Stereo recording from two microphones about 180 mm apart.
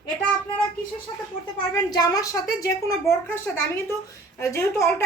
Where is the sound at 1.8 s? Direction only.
20° left (ahead or behind).